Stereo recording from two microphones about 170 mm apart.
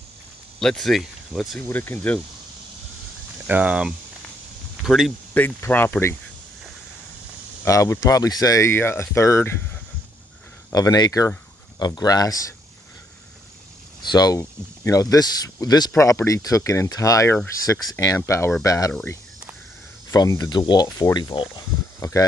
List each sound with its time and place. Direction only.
0.6 s speech: centre (ahead or behind)
1.7 s speech: 10° left (ahead or behind)
3.4 s speech: 10° right (ahead or behind)
5.3 s speech: 10° left (ahead or behind)
7.6 s speech: 20° left (ahead or behind)
10.7 s speech: 20° left (ahead or behind)
14.0 s speech: 25° left (ahead or behind)
20.1 s speech: 20° left (ahead or behind)